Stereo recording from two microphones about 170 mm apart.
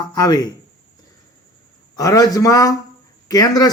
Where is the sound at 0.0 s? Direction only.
20° left (ahead or behind).